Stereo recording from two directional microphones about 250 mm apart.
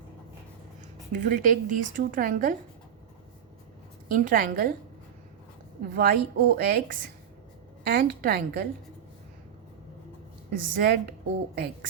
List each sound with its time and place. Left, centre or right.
1.2 s a woman's voice: right
4.1 s a woman's voice: right
5.9 s a woman's voice: right
10.5 s a woman's voice: right